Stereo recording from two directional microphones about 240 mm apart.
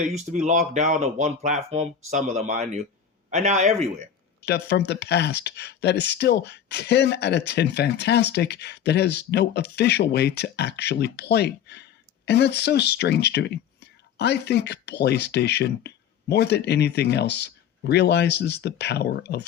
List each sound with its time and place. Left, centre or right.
0.0 s speech: right
4.4 s speech: left